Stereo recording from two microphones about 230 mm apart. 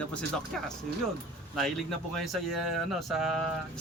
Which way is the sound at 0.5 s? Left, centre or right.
Centre.